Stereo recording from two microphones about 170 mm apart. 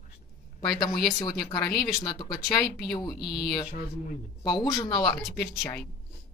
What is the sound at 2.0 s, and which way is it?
Speech, 25° left (ahead or behind).